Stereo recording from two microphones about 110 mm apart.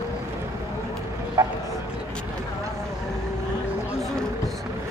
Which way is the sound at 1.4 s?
35° right (ahead or behind).